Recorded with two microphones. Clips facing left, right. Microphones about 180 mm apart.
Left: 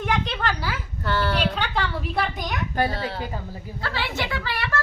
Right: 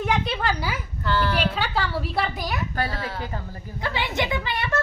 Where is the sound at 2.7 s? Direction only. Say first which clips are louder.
Left 4 dB; 25° left (ahead or behind).